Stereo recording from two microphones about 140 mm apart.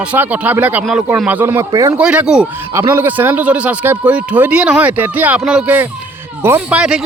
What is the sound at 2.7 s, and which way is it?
A man's voice, 20° right (ahead or behind).